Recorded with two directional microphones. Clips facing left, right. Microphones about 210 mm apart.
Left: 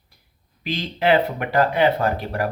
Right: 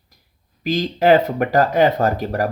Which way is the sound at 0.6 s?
45° right (ahead or behind).